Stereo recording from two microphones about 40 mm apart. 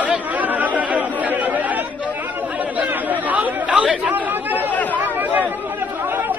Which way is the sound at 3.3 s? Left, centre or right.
Right.